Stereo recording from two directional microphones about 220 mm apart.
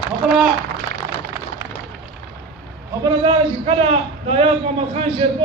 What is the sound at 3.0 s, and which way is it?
A man's voice, 25° right (ahead or behind).